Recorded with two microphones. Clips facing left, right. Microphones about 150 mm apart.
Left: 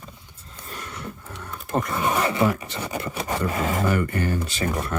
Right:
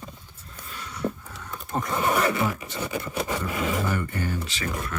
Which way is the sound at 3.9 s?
80° left.